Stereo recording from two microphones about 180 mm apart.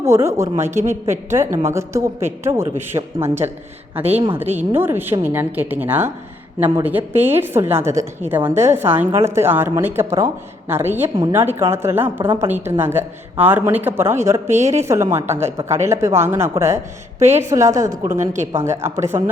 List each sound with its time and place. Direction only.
0.0 s speech: 15° right (ahead or behind)